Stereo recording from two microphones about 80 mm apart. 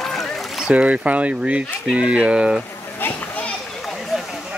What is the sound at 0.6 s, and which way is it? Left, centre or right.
Speech, centre.